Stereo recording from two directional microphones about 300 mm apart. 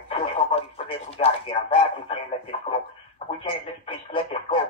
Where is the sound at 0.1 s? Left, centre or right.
Centre.